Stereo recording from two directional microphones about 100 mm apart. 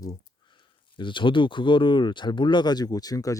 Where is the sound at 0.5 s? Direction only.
55° left (ahead or behind).